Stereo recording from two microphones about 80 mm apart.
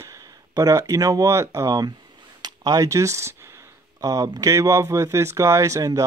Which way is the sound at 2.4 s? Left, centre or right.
Right.